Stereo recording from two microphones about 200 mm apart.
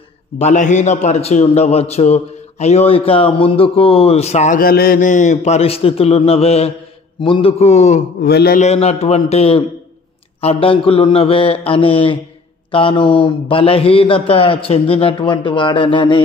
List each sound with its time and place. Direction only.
0.4 s a man's voice: 35° left (ahead or behind)
8.3 s speech: 55° left (ahead or behind)
8.5 s a man's voice: 30° left (ahead or behind)